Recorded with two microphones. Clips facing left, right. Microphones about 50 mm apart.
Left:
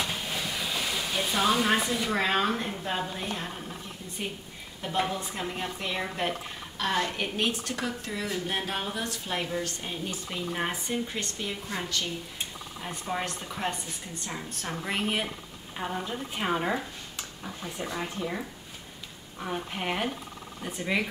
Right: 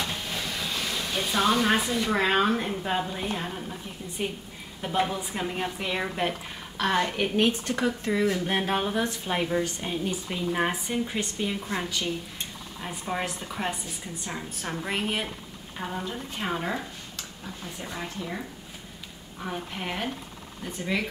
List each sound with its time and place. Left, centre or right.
0.0 s a woman's voice: centre
19.4 s a woman's voice: centre